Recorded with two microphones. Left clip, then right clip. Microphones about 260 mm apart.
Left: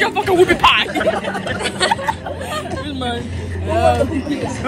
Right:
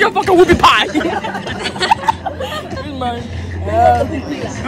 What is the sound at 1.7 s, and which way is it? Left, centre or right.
Speech, centre.